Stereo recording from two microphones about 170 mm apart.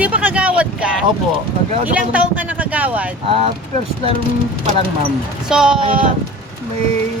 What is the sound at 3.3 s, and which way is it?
Speech, 35° right (ahead or behind).